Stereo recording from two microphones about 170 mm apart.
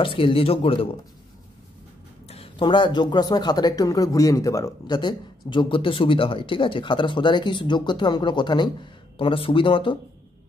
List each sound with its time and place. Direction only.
0.0 s speech: 30° left (ahead or behind)
2.2 s speech: 35° left (ahead or behind)